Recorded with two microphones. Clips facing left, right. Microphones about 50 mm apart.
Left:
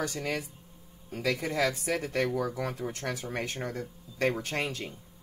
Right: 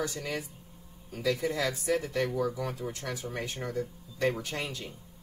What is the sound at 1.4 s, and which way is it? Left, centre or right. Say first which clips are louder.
Speech: left 2 dB; left.